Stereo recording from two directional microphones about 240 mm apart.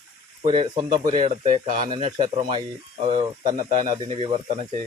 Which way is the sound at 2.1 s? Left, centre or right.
Right.